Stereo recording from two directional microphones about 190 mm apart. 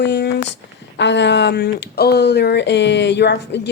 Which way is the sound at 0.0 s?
65° left (ahead or behind).